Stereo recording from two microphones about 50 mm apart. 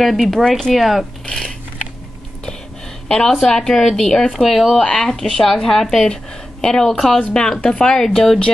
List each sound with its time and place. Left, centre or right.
0.0 s speech: centre
0.7 s speech: centre
1.2 s speech: centre
3.3 s speech: centre
4.7 s speech: centre